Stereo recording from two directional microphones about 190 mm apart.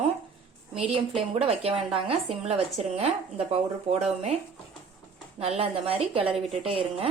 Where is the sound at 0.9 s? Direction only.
30° right (ahead or behind).